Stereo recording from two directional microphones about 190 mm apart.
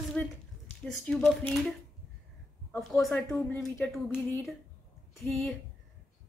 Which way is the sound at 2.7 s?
5° left (ahead or behind).